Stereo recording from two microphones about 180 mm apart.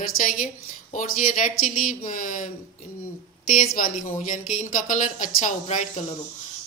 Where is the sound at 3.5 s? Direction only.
50° left (ahead or behind).